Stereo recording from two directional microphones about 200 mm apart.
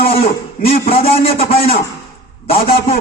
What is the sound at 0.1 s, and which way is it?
A man's voice, 30° left (ahead or behind).